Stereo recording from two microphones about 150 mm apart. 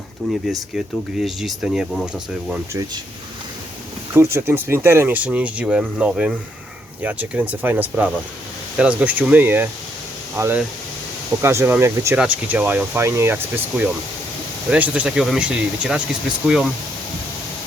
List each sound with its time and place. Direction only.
0.2 s speech: centre (ahead or behind)
4.1 s speech: 15° right (ahead or behind)